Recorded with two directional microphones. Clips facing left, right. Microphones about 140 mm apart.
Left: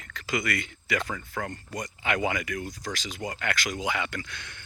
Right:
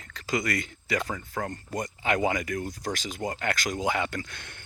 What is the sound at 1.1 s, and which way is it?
Speech, 20° right (ahead or behind).